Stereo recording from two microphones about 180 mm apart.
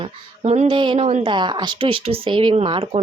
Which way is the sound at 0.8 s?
30° right (ahead or behind).